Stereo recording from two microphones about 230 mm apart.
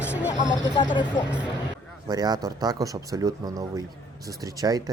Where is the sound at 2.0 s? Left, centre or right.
Centre.